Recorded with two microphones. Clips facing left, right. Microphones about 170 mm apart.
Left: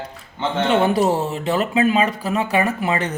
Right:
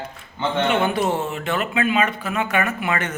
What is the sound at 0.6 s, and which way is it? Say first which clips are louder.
Speech: left 4 dB; 35° left (ahead or behind).